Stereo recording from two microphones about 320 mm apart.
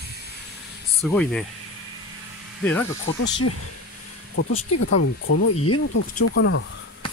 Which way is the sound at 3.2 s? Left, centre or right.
Left.